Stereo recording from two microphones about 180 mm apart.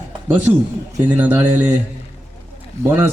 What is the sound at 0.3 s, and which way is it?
A man's voice, 10° right (ahead or behind).